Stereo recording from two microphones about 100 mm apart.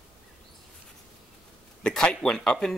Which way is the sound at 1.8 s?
10° left (ahead or behind).